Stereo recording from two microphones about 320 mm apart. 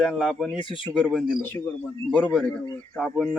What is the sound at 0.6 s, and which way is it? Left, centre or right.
Speech, centre.